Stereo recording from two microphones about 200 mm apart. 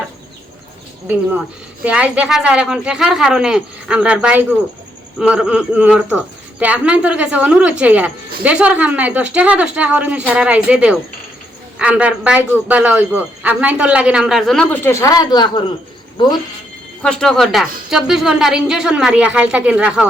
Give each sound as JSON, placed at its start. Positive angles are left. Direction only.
{"t": 1.8, "sound": "a man's voice", "side_deg": -5}
{"t": 17.0, "sound": "a man's voice", "side_deg": 5}